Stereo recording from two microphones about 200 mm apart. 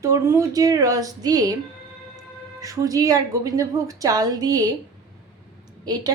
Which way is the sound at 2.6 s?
15° right (ahead or behind).